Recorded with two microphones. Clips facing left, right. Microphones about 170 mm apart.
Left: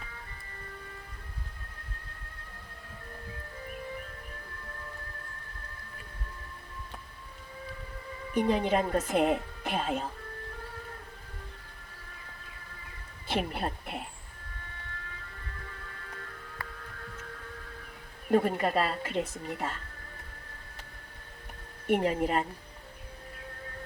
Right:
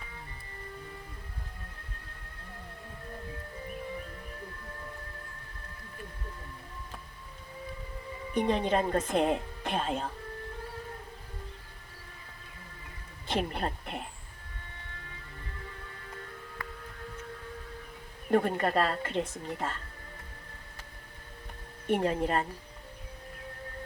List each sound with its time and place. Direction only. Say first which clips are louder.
8.4 s speech: left 1 dB; 10° left (ahead or behind)
13.2 s speech: even; 10° left (ahead or behind)
15.6 s music: right 1 dB; 20° right (ahead or behind)
18.3 s speech: left 1 dB; 10° left (ahead or behind)
21.8 s speech: left 1 dB; 10° left (ahead or behind)